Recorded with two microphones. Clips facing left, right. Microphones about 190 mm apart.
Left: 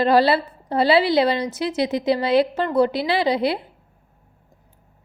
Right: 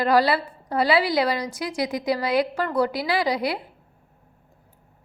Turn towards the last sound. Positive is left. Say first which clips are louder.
# left 4 dB
turn(degrees=25)  # may be behind; listen again after turning